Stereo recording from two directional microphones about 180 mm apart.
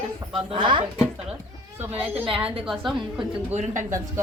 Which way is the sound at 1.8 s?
10° right (ahead or behind).